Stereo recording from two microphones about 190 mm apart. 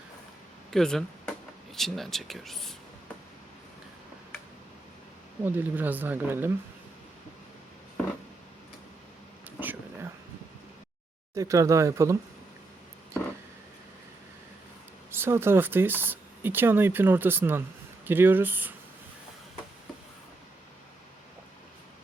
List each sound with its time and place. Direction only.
0.7 s speech: centre (ahead or behind)
5.5 s speech: 10° right (ahead or behind)
9.6 s a sound: 10° right (ahead or behind)
11.3 s speech: 15° right (ahead or behind)
15.1 s speech: 10° right (ahead or behind)